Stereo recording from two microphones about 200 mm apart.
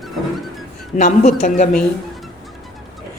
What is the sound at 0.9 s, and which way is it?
Speech, 35° left (ahead or behind).